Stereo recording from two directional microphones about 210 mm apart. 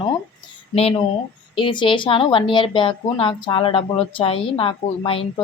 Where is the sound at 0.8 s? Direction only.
30° left (ahead or behind).